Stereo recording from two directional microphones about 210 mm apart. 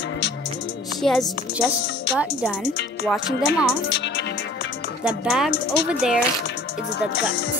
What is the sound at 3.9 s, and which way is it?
Music, 55° left (ahead or behind).